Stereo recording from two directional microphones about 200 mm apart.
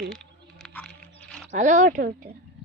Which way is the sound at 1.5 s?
35° right (ahead or behind).